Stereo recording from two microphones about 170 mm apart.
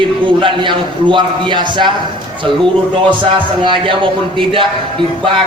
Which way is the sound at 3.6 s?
30° right (ahead or behind).